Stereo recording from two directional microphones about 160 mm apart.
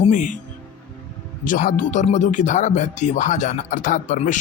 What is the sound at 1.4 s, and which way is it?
Speech, 55° left (ahead or behind).